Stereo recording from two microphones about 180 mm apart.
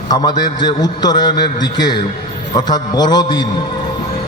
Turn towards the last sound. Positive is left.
turn(degrees=25)  # may be behind; listen again after turning